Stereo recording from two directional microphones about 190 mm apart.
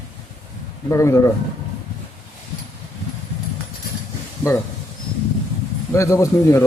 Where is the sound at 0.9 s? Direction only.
15° left (ahead or behind).